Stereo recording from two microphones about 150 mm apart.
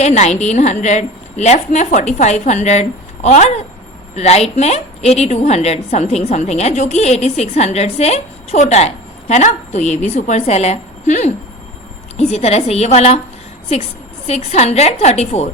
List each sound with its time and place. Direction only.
0.0 s a woman's voice: 50° left (ahead or behind)
14.3 s a woman's voice: 45° left (ahead or behind)